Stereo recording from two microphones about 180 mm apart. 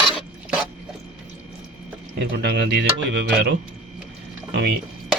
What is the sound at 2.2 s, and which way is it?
Speech, 65° right (ahead or behind).